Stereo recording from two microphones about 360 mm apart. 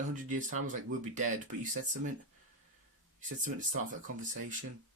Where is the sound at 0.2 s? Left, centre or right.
Right.